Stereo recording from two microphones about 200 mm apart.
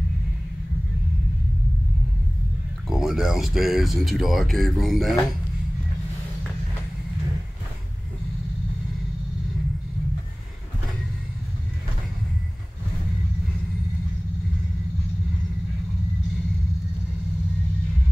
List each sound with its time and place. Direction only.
2.9 s speech: centre (ahead or behind)